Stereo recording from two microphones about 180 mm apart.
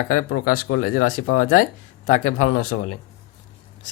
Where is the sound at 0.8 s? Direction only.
50° left (ahead or behind).